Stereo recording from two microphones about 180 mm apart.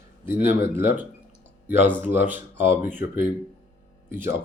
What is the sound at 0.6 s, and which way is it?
Speech, 10° right (ahead or behind).